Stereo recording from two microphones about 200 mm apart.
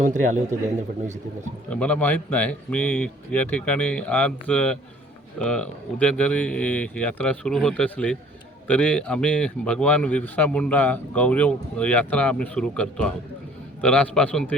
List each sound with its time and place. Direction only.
0.0 s a man's voice: 40° right (ahead or behind)
1.7 s speech: 5° left (ahead or behind)